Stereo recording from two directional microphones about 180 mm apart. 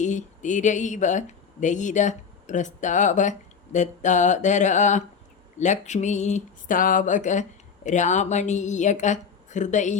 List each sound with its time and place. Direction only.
0.0 s a woman's voice: 40° left (ahead or behind)